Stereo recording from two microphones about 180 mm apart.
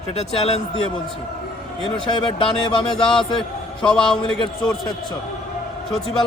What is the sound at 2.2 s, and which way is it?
Speech, 25° left (ahead or behind).